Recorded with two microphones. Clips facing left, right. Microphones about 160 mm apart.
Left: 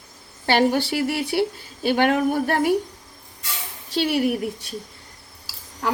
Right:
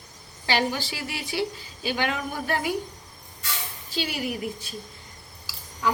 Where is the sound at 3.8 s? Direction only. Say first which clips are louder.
Left 9 dB; 65° left (ahead or behind).